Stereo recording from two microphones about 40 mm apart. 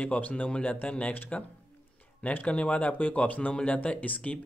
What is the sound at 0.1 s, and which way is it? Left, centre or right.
Speech, left.